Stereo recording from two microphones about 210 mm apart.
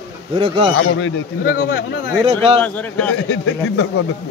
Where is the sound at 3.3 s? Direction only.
85° left.